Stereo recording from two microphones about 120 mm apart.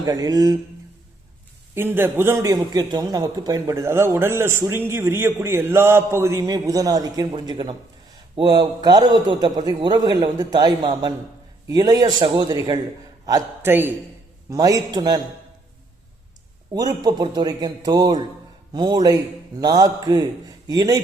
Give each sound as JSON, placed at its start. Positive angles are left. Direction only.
{"t": 0.0, "sound": "a man's voice", "side_deg": -30}
{"t": 1.7, "sound": "a man's voice", "side_deg": -20}
{"t": 13.6, "sound": "a man's voice", "side_deg": -20}
{"t": 14.5, "sound": "a man's voice", "side_deg": -30}
{"t": 16.7, "sound": "a man's voice", "side_deg": -35}